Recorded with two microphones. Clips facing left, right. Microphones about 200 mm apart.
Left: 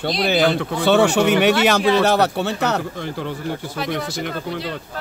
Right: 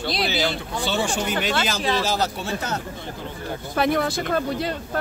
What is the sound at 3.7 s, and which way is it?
Speech, 55° right (ahead or behind).